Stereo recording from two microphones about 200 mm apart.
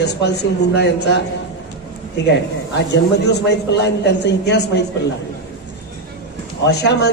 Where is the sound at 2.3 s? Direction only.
60° left (ahead or behind).